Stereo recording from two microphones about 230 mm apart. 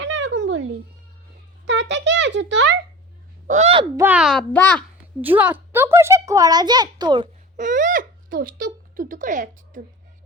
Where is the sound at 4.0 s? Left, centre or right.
Centre.